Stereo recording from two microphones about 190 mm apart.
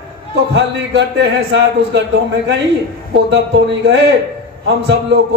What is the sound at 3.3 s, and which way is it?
A man's voice, 70° right (ahead or behind).